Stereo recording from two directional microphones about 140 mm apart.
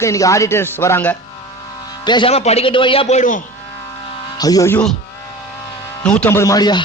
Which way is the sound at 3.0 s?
60° left (ahead or behind).